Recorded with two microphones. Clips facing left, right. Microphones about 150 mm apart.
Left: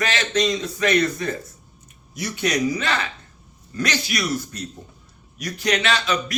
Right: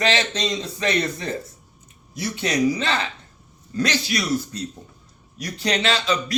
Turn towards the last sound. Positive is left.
turn(degrees=-30)  # may be behind; listen again after turning